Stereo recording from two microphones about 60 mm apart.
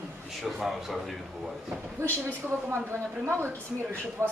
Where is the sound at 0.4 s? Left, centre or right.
Centre.